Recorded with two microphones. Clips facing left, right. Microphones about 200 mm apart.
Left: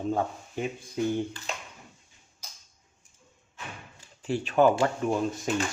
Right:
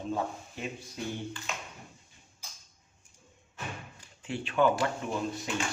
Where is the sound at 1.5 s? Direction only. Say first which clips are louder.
Left 2 dB; 35° left (ahead or behind).